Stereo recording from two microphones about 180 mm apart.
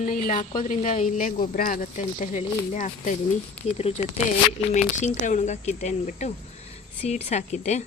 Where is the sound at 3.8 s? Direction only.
30° left (ahead or behind).